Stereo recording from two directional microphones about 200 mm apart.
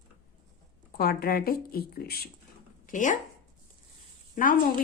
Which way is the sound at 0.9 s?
50° left (ahead or behind).